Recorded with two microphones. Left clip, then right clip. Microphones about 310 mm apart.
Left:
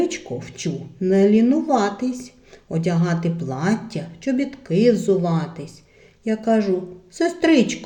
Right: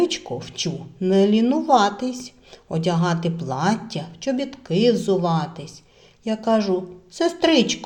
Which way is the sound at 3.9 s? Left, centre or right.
Centre.